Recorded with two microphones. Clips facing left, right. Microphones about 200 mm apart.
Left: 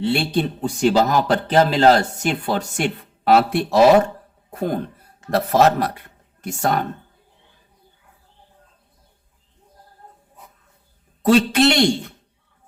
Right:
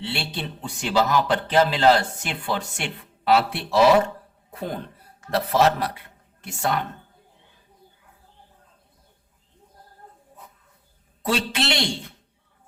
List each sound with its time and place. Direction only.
0.0 s speech: 45° left (ahead or behind)
11.2 s speech: 45° left (ahead or behind)